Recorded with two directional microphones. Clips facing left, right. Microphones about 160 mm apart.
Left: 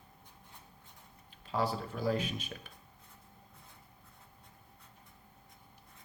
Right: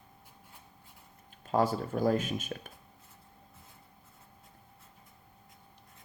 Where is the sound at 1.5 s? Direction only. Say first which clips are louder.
Right 5 dB; 45° right (ahead or behind).